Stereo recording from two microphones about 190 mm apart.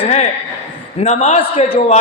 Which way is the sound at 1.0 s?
35° left (ahead or behind).